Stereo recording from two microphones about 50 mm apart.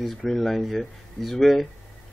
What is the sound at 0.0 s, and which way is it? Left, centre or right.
Speech, centre.